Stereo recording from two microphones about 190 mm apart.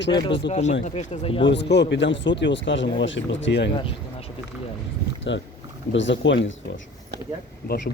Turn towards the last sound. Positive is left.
turn(degrees=70)  # may be behind; listen again after turning